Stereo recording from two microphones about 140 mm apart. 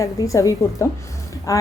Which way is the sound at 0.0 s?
25° left (ahead or behind).